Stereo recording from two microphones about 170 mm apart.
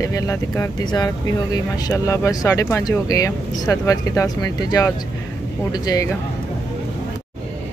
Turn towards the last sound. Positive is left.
turn(degrees=20)  # may be behind; listen again after turning